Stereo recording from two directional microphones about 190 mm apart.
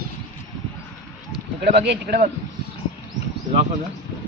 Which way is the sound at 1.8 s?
60° right (ahead or behind).